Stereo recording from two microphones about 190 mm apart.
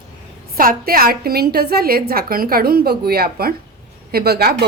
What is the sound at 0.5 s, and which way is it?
A woman's voice, 50° right (ahead or behind).